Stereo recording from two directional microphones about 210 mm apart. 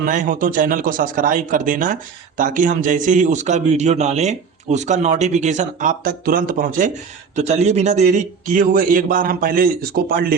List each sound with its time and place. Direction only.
0.0 s a man's voice: 40° right (ahead or behind)